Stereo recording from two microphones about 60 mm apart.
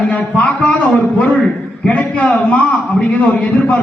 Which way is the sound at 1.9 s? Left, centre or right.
Left.